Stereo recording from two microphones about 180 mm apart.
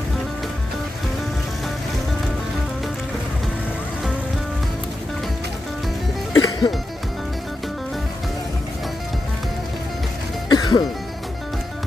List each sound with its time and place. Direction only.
6.3 s music: 20° left (ahead or behind)
10.5 s music: 25° left (ahead or behind)